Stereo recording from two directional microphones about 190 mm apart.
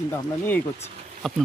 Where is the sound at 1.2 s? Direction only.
Centre (ahead or behind).